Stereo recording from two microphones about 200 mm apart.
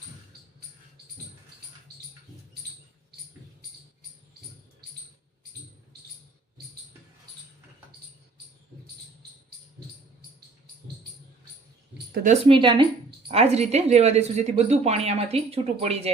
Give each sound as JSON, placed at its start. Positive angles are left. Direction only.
{"t": 12.1, "sound": "speech", "side_deg": -40}
{"t": 12.5, "sound": "speech", "side_deg": -25}